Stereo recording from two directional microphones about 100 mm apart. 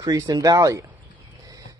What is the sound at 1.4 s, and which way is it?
Bird, 35° right (ahead or behind).